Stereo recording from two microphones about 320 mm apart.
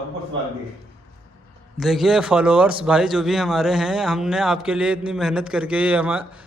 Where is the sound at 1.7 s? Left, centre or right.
Centre.